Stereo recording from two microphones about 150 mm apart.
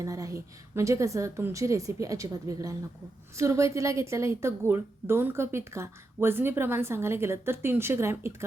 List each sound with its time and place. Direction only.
0.0 s a woman's voice: 20° right (ahead or behind)